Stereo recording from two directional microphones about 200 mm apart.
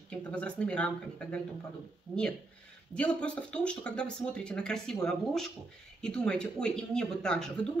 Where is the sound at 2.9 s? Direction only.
5° left (ahead or behind).